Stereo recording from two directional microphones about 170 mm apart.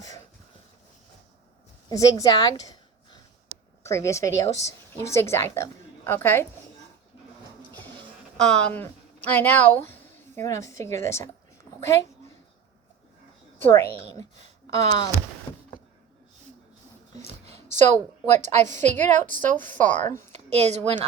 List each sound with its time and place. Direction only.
1.9 s a woman's voice: 20° left (ahead or behind)
8.4 s speech: 5° left (ahead or behind)
13.6 s speech: 15° left (ahead or behind)
17.7 s a woman's voice: 45° right (ahead or behind)
20.1 s speech: 15° left (ahead or behind)
20.3 s a woman's voice: 40° right (ahead or behind)